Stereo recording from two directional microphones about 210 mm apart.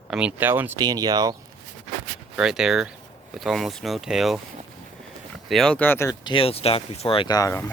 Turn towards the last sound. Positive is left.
turn(degrees=15)  # may be behind; listen again after turning